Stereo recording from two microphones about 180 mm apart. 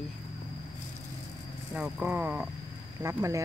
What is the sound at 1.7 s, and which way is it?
Speech, 10° right (ahead or behind).